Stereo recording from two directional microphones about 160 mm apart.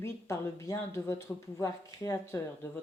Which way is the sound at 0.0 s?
20° left (ahead or behind).